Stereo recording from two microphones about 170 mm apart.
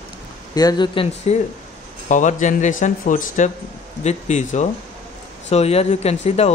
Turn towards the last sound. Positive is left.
turn(degrees=40)  # may be behind; listen again after turning